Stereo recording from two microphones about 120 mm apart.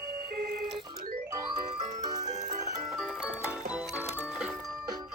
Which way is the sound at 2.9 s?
5° right (ahead or behind).